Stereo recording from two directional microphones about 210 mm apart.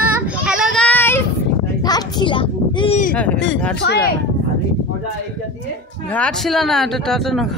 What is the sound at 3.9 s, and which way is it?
Speech, 50° left (ahead or behind).